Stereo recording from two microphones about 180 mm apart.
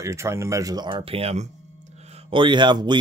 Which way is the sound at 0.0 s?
15° right (ahead or behind).